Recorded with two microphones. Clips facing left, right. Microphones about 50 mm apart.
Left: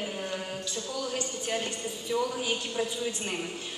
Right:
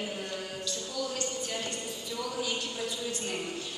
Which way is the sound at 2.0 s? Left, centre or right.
Left.